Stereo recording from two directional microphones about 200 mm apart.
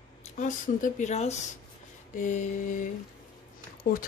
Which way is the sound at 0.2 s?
40° left (ahead or behind).